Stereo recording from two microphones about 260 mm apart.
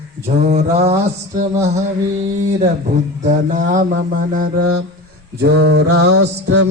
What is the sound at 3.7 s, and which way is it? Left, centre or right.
Mantra, right.